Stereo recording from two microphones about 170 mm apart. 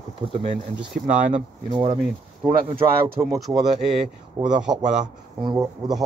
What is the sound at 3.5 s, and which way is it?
A man's voice, 15° right (ahead or behind).